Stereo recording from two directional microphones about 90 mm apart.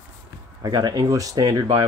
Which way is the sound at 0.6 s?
50° right (ahead or behind).